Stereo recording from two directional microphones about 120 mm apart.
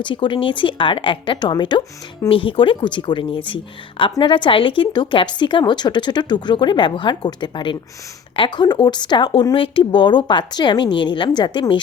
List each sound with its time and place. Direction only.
0.0 s a woman's voice: 45° left (ahead or behind)